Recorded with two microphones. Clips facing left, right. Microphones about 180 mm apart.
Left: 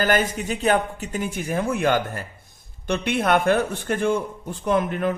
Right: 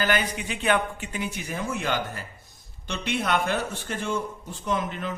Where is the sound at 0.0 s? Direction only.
45° left (ahead or behind).